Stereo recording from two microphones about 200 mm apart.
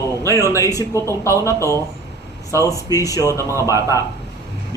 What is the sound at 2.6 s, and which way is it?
Speech, 15° left (ahead or behind).